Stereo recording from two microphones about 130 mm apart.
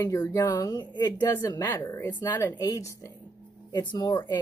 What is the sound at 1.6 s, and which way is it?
A woman's voice, 20° left (ahead or behind).